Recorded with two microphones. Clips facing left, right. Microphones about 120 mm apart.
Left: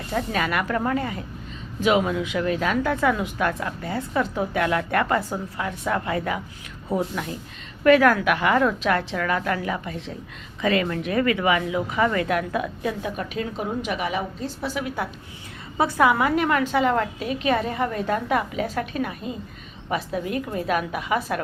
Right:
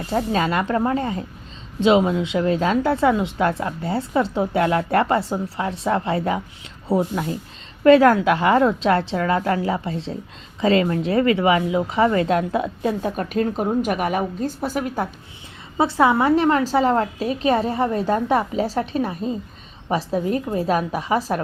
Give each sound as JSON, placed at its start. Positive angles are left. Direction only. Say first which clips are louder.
{"t": 0.1, "sound": "a woman's voice", "louder": "right 4 dB", "side_deg": -30}
{"t": 15.8, "sound": "a woman's voice", "louder": "right 2 dB", "side_deg": -25}